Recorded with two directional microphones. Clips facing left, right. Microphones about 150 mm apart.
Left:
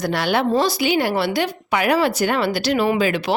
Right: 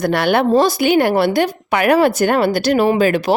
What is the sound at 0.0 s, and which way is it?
Speech, 55° right (ahead or behind).